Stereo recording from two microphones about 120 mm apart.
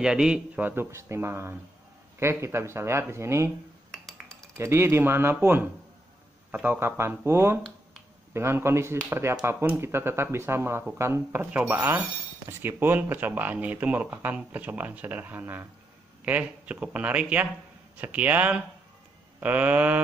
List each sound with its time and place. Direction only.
0.0 s speech: 5° right (ahead or behind); by 3.5 s 25° right (ahead or behind)
3.9 s a sound: 5° left (ahead or behind)
4.6 s speech: 20° right (ahead or behind)